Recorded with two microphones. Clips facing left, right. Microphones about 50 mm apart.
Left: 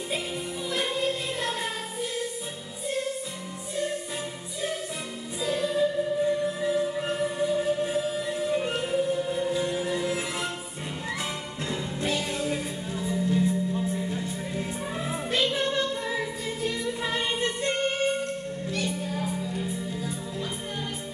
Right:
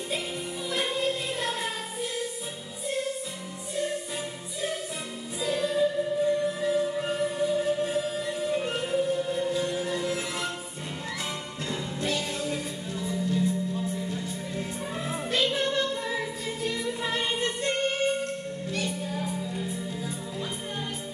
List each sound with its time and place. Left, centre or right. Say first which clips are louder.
0.7 s music: even; centre
5.4 s music: even; centre
11.7 s music: left 1 dB; centre
15.0 s music: even; centre